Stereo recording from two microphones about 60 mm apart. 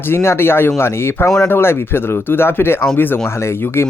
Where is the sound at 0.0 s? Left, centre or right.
Left.